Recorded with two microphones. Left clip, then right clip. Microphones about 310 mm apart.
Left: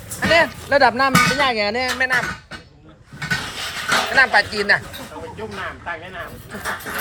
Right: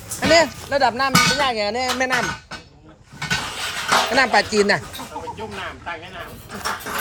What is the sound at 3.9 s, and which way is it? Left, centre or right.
Speech, right.